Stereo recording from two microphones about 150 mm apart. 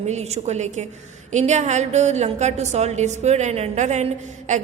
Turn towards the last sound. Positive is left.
turn(degrees=-50)  # may be behind; listen again after turning